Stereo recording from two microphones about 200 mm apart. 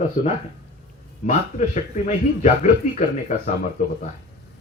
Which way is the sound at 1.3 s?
40° left (ahead or behind).